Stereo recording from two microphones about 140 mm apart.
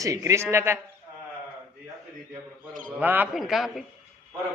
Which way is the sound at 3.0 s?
10° right (ahead or behind).